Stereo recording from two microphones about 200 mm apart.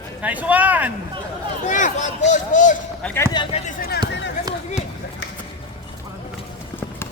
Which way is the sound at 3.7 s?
50° left (ahead or behind).